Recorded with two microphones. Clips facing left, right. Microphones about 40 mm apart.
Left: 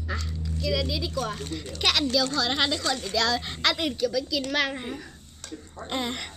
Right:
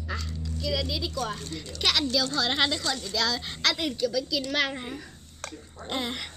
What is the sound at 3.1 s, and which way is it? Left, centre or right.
A woman's voice, centre.